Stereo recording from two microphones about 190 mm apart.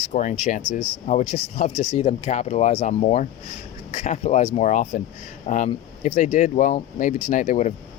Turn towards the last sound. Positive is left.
turn(degrees=40)  # may be behind; listen again after turning